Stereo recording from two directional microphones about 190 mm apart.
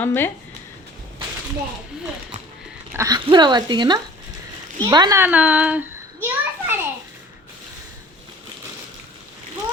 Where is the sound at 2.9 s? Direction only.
20° right (ahead or behind).